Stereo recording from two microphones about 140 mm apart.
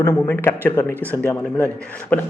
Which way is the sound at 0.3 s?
15° left (ahead or behind).